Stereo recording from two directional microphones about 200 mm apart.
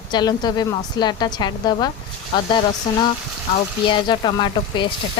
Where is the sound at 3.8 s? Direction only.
25° left (ahead or behind).